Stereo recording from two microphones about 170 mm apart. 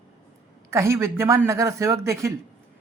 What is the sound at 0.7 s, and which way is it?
Speech, 15° right (ahead or behind).